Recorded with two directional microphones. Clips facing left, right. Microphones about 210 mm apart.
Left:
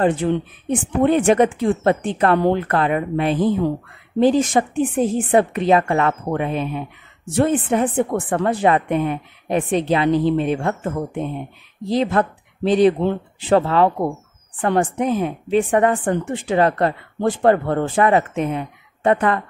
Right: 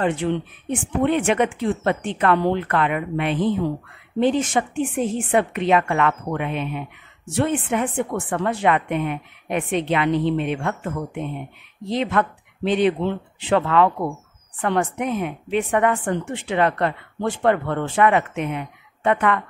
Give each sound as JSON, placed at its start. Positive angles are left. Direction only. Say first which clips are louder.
{"t": 0.0, "sound": "a woman's voice", "louder": "left 4 dB", "side_deg": 35}